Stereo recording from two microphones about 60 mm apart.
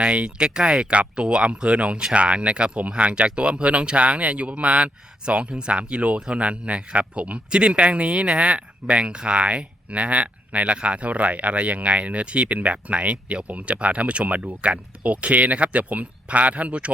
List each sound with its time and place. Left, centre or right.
0.0 s speech: centre